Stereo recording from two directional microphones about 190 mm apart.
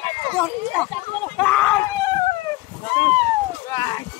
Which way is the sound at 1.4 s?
5° left (ahead or behind).